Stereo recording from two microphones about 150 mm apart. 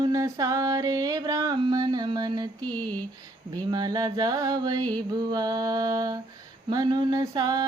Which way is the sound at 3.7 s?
25° right (ahead or behind).